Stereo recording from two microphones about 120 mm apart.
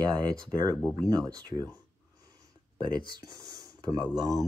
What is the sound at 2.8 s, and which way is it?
Speech, 35° right (ahead or behind).